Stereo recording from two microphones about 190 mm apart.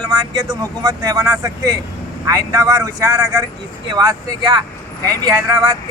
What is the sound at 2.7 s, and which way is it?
Speech, 20° right (ahead or behind).